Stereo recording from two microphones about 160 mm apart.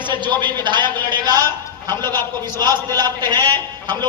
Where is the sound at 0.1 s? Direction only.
30° right (ahead or behind).